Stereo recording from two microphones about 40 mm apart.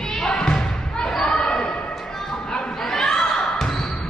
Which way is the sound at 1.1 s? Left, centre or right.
Centre.